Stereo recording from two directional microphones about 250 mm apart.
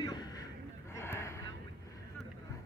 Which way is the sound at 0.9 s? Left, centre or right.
Centre.